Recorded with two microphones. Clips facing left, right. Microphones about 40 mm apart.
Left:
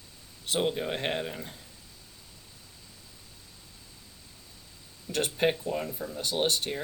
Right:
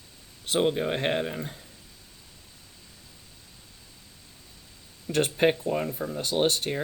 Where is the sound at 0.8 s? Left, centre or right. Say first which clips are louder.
Right 4 dB; right.